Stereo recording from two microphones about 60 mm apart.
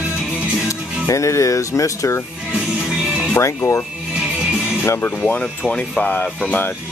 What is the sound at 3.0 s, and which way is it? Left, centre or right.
Music, centre.